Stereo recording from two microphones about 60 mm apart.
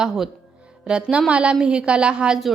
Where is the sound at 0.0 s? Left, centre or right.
Centre.